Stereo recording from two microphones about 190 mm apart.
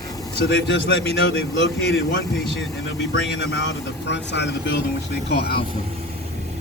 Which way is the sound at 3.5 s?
65° left (ahead or behind).